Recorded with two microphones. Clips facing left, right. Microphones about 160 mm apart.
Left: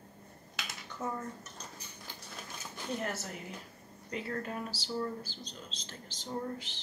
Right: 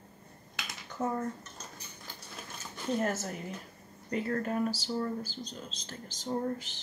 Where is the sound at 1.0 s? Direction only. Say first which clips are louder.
Right 5 dB; 30° right (ahead or behind).